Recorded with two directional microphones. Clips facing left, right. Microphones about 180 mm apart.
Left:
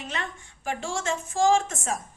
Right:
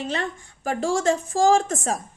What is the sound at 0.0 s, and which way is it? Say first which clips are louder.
Speech: right 7 dB; 35° right (ahead or behind).